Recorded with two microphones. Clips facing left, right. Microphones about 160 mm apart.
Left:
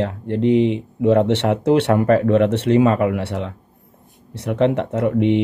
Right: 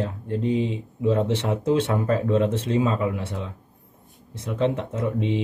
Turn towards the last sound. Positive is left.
turn(degrees=70)  # may be behind; listen again after turning